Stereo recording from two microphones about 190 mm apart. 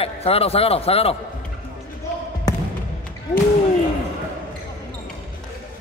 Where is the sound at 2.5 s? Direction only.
20° left (ahead or behind).